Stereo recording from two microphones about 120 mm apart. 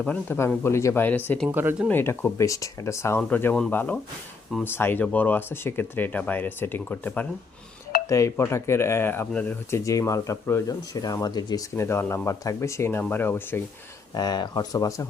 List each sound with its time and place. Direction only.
0.0 s speech: 15° left (ahead or behind)
1.5 s speech: 15° right (ahead or behind)
1.9 s speech: 15° left (ahead or behind)
8.1 s speech: 25° left (ahead or behind)
9.8 s speech: 25° left (ahead or behind)
14.2 s speech: 35° left (ahead or behind)